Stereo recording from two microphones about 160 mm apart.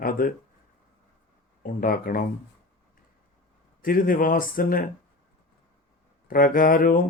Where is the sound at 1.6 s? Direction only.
60° left (ahead or behind).